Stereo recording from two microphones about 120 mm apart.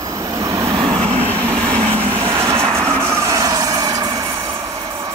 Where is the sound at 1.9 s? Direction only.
25° right (ahead or behind).